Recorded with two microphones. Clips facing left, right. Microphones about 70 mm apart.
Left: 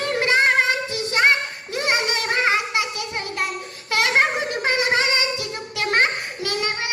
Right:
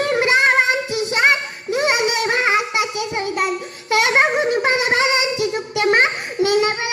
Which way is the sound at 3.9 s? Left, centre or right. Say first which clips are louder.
Right 3 dB; right.